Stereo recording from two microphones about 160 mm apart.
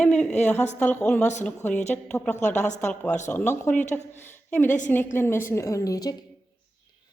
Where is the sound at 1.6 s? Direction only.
50° left (ahead or behind).